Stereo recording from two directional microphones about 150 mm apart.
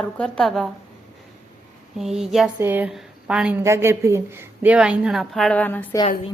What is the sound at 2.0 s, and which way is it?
A woman's voice, 5° right (ahead or behind).